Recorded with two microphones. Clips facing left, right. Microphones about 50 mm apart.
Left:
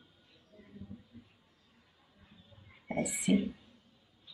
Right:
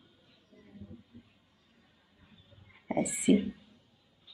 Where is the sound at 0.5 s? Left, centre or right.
Right.